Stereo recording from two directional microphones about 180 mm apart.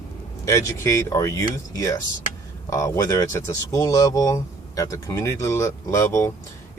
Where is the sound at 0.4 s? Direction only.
15° left (ahead or behind).